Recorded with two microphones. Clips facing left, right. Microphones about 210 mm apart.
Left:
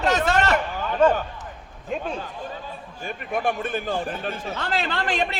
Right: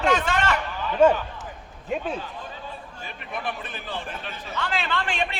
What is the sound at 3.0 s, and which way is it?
Speech, 50° left (ahead or behind).